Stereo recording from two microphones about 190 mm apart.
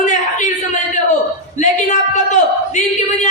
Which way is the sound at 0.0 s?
40° left (ahead or behind).